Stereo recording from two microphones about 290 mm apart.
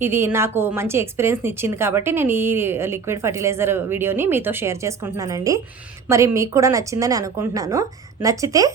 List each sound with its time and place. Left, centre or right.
0.0 s a woman's voice: centre